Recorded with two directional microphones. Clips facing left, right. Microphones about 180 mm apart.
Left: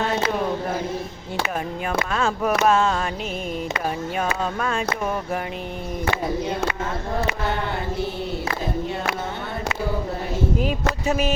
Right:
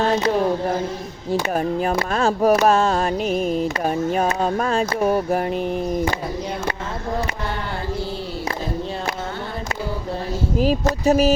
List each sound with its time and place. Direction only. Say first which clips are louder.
1.3 s music: right 7 dB; 35° right (ahead or behind)
10.6 s music: right 5 dB; 35° right (ahead or behind)